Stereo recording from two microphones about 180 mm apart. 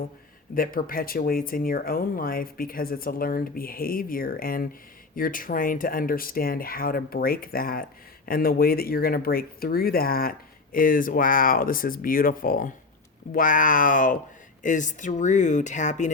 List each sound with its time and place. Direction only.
0.5 s speech: 50° left (ahead or behind)